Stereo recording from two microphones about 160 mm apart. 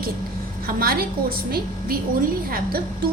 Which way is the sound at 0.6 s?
70° right (ahead or behind).